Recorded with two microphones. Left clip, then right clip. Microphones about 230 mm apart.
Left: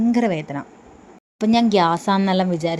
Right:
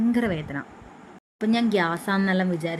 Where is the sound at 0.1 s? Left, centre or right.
Centre.